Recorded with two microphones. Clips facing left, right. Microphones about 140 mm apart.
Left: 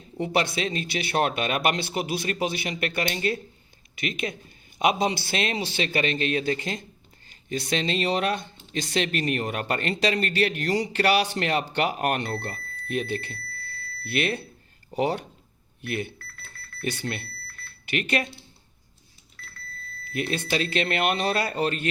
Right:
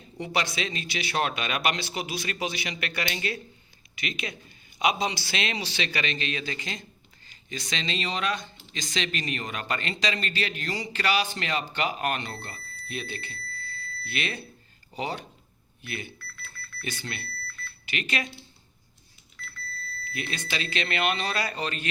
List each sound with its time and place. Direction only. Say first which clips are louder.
0.2 s speech: left 4 dB; 50° left (ahead or behind)
16.8 s smoke detector: left 6 dB; 60° left (ahead or behind)
20.1 s speech: left 7 dB; 50° left (ahead or behind)